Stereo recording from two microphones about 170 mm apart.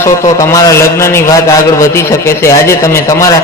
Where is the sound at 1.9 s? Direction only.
15° left (ahead or behind).